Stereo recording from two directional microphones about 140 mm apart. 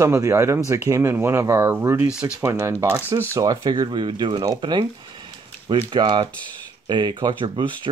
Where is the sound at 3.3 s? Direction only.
30° right (ahead or behind).